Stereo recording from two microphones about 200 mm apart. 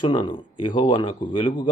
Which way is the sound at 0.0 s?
20° left (ahead or behind).